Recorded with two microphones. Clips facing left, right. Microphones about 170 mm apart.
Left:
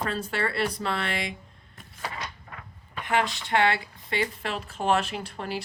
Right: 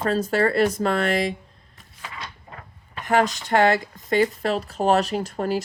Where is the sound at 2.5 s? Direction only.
40° right (ahead or behind).